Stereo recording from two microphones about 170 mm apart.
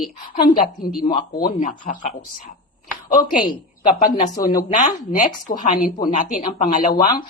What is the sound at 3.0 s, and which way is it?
Speech, 55° left (ahead or behind).